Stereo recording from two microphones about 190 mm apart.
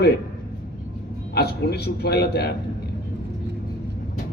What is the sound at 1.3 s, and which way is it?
Speech, 55° left (ahead or behind).